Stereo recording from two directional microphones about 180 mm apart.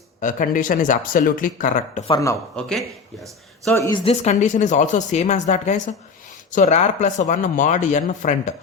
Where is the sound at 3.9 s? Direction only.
30° left (ahead or behind).